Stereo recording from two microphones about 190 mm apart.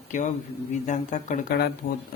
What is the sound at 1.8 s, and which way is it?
Speech, 50° left (ahead or behind).